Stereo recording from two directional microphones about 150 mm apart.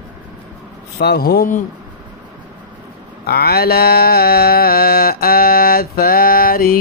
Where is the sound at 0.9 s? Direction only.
90° left.